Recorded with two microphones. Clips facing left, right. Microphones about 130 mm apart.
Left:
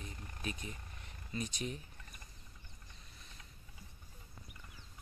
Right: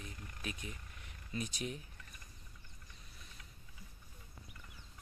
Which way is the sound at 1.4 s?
5° right (ahead or behind).